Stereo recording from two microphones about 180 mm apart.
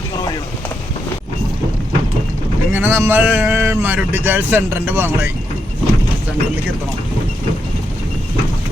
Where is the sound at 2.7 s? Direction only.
10° right (ahead or behind).